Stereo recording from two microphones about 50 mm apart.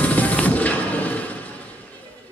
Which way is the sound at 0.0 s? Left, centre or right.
Left.